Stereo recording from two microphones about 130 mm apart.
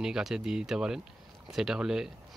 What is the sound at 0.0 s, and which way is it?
Speech, 5° right (ahead or behind).